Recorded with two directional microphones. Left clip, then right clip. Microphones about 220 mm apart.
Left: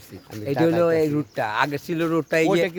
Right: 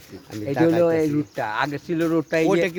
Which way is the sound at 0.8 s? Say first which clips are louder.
Even; 50° left (ahead or behind).